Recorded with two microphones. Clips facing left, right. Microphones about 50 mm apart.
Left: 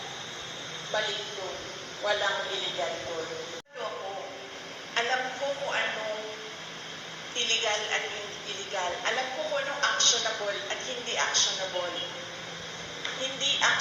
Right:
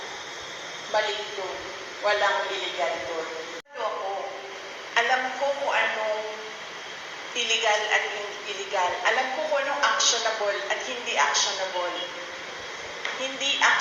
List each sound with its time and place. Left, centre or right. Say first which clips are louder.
1.0 s a woman's voice: right 4 dB; right
4.9 s a woman's voice: right 5 dB; right
7.3 s a woman's voice: right 5 dB; right
10.4 s a woman's voice: right 6 dB; right
13.0 s a woman's voice: right 3 dB; right